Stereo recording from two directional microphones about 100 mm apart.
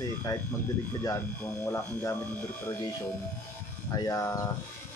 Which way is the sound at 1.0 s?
30° left (ahead or behind).